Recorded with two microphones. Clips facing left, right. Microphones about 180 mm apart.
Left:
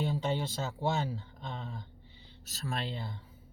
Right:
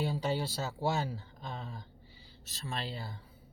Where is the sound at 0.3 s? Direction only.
35° right (ahead or behind).